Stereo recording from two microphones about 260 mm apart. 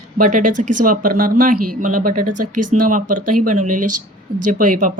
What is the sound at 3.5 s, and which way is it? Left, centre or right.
Speech, right.